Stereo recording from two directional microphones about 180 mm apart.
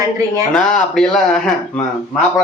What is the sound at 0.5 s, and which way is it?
Speech, 5° left (ahead or behind).